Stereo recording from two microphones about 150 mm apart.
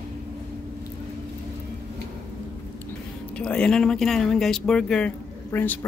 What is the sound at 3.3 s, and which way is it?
Speech, 5° left (ahead or behind).